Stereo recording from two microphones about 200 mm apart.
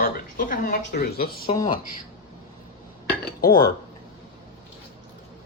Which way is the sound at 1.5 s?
25° left (ahead or behind).